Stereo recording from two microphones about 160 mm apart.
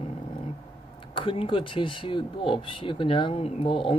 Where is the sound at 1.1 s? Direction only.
35° left (ahead or behind).